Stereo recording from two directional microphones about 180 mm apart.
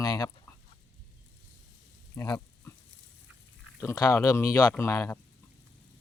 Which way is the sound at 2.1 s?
20° left (ahead or behind).